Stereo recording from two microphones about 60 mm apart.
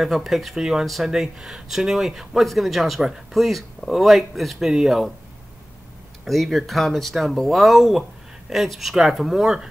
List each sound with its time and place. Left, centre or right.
0.0 s speech: centre
6.2 s speech: centre